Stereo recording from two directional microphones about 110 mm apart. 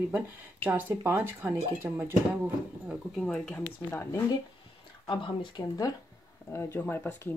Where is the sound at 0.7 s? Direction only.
20° right (ahead or behind).